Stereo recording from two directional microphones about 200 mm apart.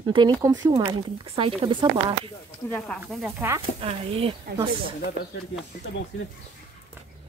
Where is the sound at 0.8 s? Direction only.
30° right (ahead or behind).